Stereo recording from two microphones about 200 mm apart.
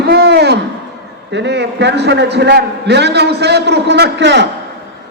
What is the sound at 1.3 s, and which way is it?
A man's voice, 60° right (ahead or behind).